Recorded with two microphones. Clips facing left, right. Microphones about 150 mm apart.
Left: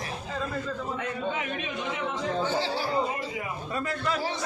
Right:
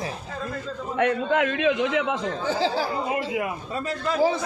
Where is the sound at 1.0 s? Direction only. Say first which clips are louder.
Right 14 dB; 80° right.